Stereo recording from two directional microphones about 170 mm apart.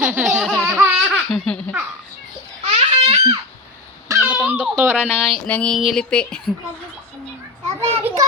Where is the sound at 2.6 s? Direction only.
35° right (ahead or behind).